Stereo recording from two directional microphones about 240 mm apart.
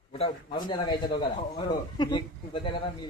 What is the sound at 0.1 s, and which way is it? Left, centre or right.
A man's voice, left.